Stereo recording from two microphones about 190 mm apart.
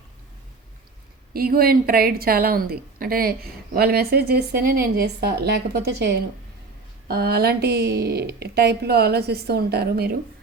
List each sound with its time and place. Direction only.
1.3 s a woman's voice: 50° right (ahead or behind)